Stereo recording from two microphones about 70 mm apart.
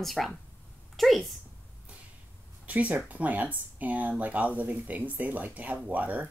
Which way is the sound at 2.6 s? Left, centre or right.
Right.